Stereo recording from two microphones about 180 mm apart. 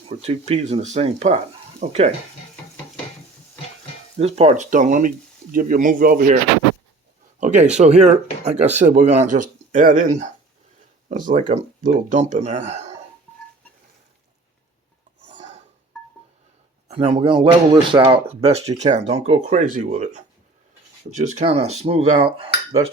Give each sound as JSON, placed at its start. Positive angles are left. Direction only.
{"t": 0.1, "sound": "speech", "side_deg": -35}
{"t": 4.2, "sound": "speech", "side_deg": -35}
{"t": 7.3, "sound": "a sound", "side_deg": -45}
{"t": 7.8, "sound": "speech", "side_deg": -40}
{"t": 15.3, "sound": "a sound", "side_deg": -40}
{"t": 16.9, "sound": "speech", "side_deg": -30}